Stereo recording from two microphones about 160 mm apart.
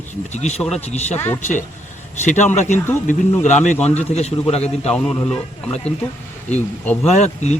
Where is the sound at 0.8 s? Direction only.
45° left (ahead or behind).